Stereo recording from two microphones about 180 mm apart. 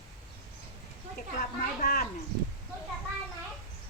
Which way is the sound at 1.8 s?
55° left (ahead or behind).